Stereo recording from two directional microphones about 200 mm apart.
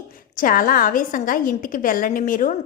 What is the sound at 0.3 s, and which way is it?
A woman's voice, 45° left (ahead or behind).